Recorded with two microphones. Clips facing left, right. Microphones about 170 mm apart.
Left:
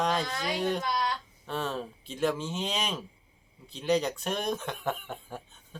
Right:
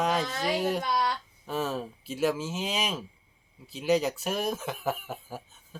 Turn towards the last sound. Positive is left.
turn(degrees=-5)  # may be behind; listen again after turning